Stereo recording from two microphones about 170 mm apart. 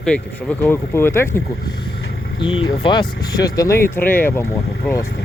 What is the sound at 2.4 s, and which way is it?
Speech, 30° left (ahead or behind).